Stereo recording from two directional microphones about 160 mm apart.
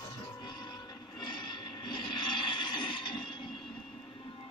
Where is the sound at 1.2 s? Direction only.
30° left (ahead or behind).